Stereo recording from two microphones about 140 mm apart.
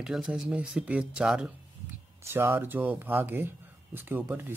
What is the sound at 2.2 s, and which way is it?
Speech, 15° right (ahead or behind).